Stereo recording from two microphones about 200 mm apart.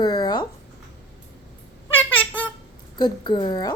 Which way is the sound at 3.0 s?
20° left (ahead or behind).